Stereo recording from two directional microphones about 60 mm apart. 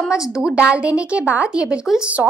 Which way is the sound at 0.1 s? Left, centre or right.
Centre.